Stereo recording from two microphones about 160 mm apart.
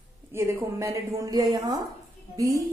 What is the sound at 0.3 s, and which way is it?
A woman's voice, 15° right (ahead or behind).